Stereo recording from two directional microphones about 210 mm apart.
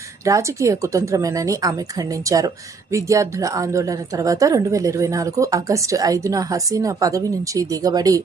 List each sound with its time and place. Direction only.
0.3 s a woman's voice: 15° right (ahead or behind)